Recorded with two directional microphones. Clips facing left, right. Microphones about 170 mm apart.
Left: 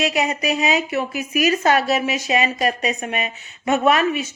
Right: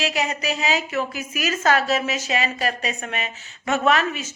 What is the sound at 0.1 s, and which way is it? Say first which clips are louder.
A woman's voice: left 4 dB; 20° left (ahead or behind).